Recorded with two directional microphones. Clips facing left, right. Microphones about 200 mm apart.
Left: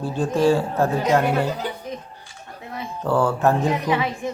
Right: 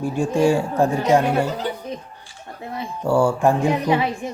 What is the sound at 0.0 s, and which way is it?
Speech, 10° right (ahead or behind).